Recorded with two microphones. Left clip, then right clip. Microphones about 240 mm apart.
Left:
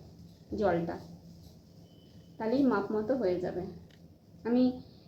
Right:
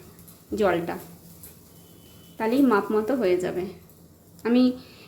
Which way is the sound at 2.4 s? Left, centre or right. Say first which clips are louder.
Right 8 dB; right.